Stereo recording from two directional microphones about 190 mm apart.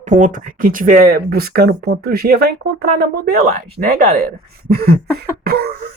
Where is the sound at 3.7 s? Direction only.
50° right (ahead or behind).